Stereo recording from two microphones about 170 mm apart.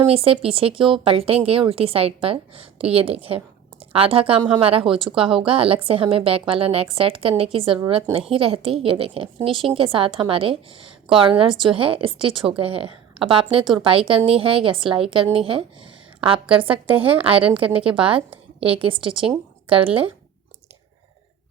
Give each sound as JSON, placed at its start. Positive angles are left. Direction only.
{"t": 0.0, "sound": "a woman's voice", "side_deg": -35}
{"t": 16.9, "sound": "a woman's voice", "side_deg": -10}
{"t": 17.2, "sound": "speech", "side_deg": -30}